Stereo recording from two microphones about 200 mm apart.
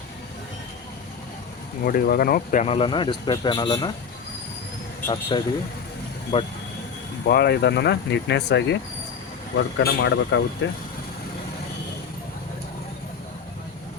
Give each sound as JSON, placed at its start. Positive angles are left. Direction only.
{"t": 1.8, "sound": "speech", "side_deg": 50}
{"t": 5.3, "sound": "speech", "side_deg": 25}
{"t": 7.3, "sound": "speech", "side_deg": 55}